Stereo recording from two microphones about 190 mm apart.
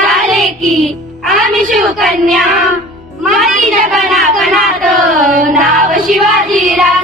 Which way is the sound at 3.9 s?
Centre (ahead or behind).